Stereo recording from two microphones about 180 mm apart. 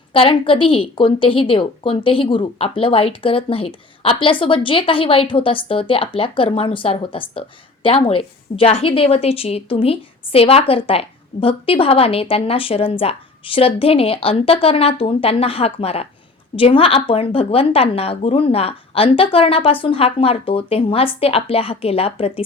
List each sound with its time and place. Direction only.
0.1 s a woman's voice: 30° left (ahead or behind)